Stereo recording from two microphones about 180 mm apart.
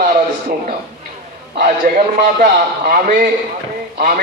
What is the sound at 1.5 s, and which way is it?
A man's voice, 55° right (ahead or behind).